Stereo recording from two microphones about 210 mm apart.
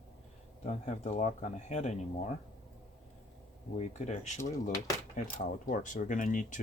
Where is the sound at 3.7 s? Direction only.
35° left (ahead or behind).